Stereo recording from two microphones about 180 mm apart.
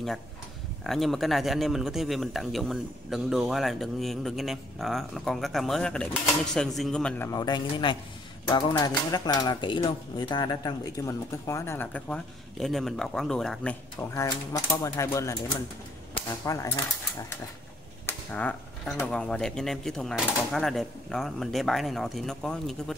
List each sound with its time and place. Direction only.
0.8 s a man's voice: centre (ahead or behind)
7.2 s a man's voice: 25° left (ahead or behind); by 13.7 s 5° left (ahead or behind)
13.9 s speech: 15° left (ahead or behind)
16.4 s speech: 15° left (ahead or behind)
18.0 s a man's voice: 10° left (ahead or behind)